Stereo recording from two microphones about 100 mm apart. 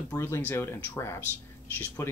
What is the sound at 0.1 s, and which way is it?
Speech, 25° left (ahead or behind).